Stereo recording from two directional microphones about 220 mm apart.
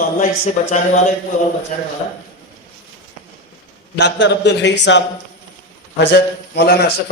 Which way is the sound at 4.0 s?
55° left (ahead or behind).